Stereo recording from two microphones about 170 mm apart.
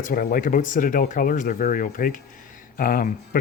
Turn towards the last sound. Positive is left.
turn(degrees=55)  # may be behind; listen again after turning